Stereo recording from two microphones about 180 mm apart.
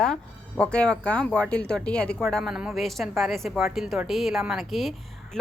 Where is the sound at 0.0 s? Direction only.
5° left (ahead or behind).